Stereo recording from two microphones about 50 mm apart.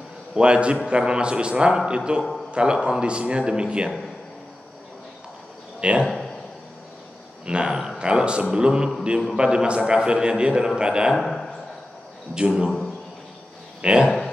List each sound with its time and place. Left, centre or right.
0.3 s a man's voice: right
5.8 s a man's voice: right
7.4 s a man's voice: centre
11.1 s a sound: centre
12.4 s a man's voice: centre
13.7 s speech: centre
14.0 s a sound: centre